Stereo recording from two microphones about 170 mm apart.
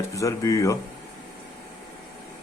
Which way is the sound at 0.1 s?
20° left (ahead or behind).